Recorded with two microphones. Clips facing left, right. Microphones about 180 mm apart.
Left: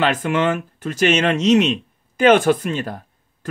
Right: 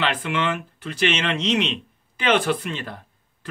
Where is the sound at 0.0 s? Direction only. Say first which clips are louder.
Left 6 dB; 45° left (ahead or behind).